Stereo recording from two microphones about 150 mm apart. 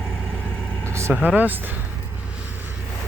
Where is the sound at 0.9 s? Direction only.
15° right (ahead or behind).